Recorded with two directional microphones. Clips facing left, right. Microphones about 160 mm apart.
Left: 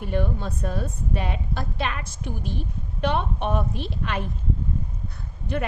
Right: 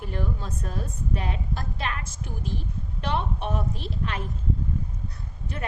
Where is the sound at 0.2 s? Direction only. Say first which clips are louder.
Left 4 dB; 70° left (ahead or behind).